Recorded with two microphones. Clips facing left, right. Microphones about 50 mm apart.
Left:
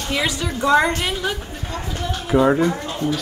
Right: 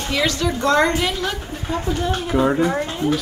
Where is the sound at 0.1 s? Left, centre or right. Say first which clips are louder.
Right 2 dB; centre.